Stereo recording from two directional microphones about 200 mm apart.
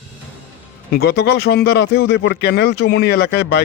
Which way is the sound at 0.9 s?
55° left (ahead or behind).